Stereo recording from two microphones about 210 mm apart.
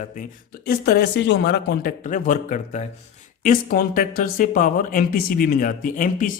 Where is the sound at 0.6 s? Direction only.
45° left (ahead or behind).